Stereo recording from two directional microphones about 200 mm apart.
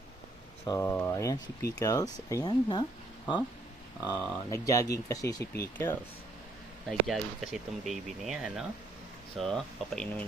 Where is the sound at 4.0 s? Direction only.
15° left (ahead or behind).